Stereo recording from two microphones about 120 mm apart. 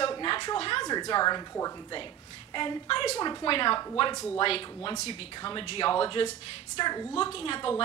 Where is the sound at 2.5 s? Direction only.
40° left (ahead or behind).